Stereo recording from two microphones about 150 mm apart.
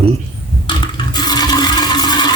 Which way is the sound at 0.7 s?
30° left (ahead or behind).